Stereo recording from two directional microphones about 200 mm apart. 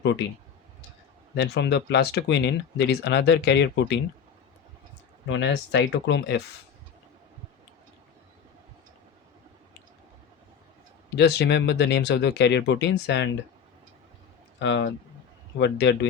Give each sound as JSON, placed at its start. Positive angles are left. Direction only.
{"t": 1.4, "sound": "speech", "side_deg": 60}
{"t": 5.3, "sound": "speech", "side_deg": 65}
{"t": 11.1, "sound": "speech", "side_deg": 55}
{"t": 14.6, "sound": "speech", "side_deg": 65}